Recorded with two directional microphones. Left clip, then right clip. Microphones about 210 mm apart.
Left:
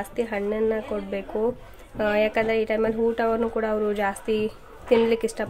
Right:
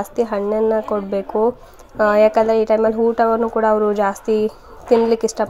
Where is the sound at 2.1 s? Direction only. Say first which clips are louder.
Right 10 dB; 20° right (ahead or behind).